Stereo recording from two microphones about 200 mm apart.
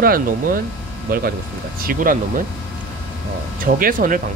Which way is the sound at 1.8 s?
45° right (ahead or behind).